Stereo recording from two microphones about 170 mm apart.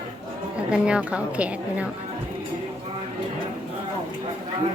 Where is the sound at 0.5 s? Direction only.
5° right (ahead or behind).